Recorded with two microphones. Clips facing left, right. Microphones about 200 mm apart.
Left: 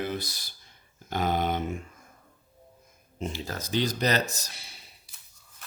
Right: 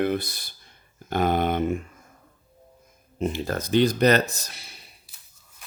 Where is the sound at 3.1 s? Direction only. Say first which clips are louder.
Right 8 dB; 55° right (ahead or behind).